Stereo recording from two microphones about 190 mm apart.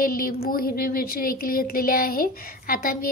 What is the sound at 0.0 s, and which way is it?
A woman's voice, 50° left (ahead or behind).